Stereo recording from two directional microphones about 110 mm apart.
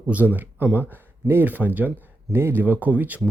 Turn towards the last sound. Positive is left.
turn(degrees=-15)  # may be behind; listen again after turning